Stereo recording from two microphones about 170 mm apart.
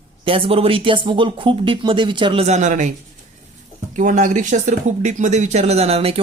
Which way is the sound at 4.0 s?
50° right (ahead or behind).